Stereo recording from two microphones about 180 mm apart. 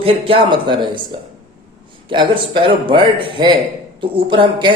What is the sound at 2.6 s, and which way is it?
Speech, 30° right (ahead or behind).